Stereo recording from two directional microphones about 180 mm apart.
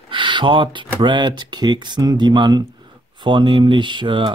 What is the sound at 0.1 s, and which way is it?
Speech, 25° right (ahead or behind).